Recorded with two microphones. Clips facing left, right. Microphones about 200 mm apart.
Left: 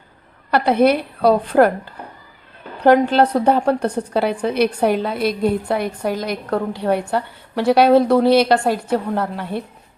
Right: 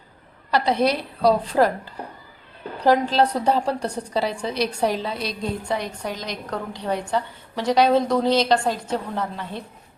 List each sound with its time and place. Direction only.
0.5 s a woman's voice: 55° left (ahead or behind)